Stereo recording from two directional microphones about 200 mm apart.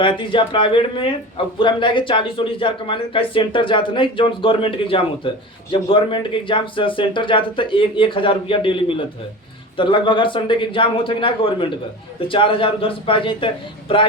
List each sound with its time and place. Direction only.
0.0 s speech: 25° left (ahead or behind)